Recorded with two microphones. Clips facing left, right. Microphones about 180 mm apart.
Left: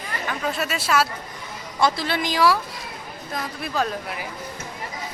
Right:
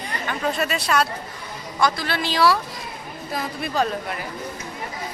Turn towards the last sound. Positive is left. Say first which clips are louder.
# right 2 dB
turn(degrees=0)  # may be behind; listen again after turning